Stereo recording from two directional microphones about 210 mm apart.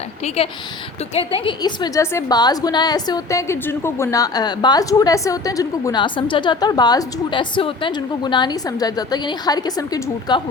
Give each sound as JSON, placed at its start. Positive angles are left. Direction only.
{"t": 1.1, "sound": "a woman's voice", "side_deg": 25}